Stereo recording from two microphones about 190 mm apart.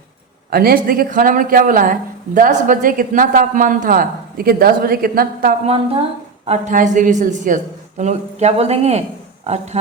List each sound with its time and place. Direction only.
0.5 s speech: 50° right (ahead or behind)
5.6 s a woman's voice: 30° right (ahead or behind)